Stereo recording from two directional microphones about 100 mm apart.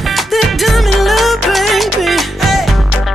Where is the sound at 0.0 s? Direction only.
Centre (ahead or behind).